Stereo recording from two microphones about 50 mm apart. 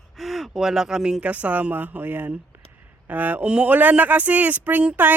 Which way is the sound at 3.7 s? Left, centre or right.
Right.